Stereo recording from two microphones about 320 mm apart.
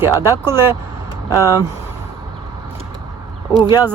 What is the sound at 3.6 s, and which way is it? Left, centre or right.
Speech, centre.